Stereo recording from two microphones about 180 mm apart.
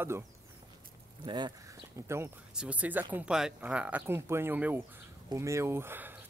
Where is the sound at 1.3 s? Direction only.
25° right (ahead or behind).